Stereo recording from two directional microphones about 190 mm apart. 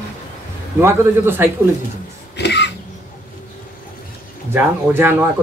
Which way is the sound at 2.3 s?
60° left (ahead or behind).